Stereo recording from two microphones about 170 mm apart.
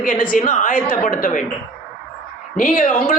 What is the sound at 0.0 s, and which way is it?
A man's voice, 55° left (ahead or behind).